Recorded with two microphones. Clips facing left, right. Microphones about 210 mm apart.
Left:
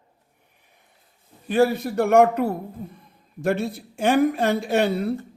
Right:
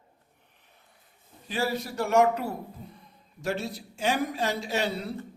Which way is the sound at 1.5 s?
55° left (ahead or behind).